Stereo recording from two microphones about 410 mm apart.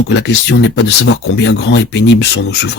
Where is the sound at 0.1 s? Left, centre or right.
Left.